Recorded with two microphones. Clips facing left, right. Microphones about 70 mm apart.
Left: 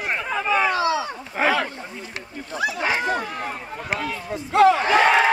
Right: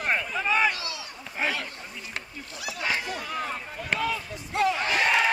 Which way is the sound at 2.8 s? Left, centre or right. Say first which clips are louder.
Left 3 dB; left.